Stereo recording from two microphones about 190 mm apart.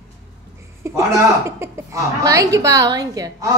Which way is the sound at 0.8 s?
15° right (ahead or behind).